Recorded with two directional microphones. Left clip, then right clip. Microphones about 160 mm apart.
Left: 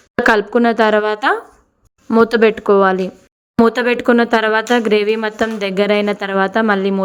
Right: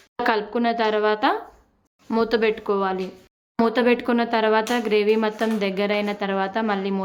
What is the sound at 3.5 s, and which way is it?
Speech, 35° left (ahead or behind).